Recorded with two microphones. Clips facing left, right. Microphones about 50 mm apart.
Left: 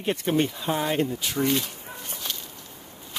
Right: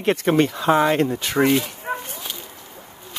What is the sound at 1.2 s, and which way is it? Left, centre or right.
Speech, right.